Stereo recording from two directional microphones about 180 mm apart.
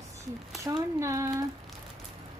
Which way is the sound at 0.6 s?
15° right (ahead or behind).